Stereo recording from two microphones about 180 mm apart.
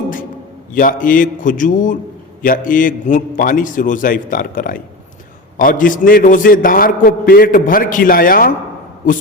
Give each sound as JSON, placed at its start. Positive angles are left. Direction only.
{"t": 0.7, "sound": "a man's voice", "side_deg": 50}